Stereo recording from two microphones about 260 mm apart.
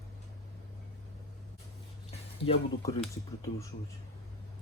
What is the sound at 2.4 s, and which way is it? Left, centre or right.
Speech, left.